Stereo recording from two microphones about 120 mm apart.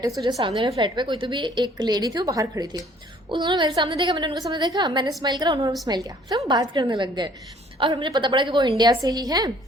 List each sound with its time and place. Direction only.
0.2 s a woman's voice: 35° right (ahead or behind)
3.2 s a woman's voice: 40° right (ahead or behind)